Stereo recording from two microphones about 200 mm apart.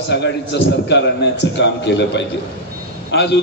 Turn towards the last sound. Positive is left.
turn(degrees=55)  # may be behind; listen again after turning